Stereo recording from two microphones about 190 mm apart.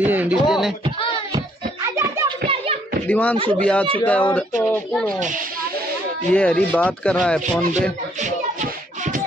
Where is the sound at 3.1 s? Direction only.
10° left (ahead or behind).